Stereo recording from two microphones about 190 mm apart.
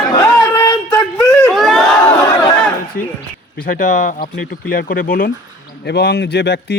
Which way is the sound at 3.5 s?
45° left (ahead or behind).